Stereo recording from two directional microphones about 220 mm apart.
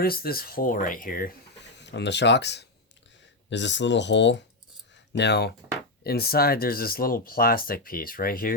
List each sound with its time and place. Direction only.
0.0 s speech: 45° left (ahead or behind)
1.8 s speech: 50° left (ahead or behind)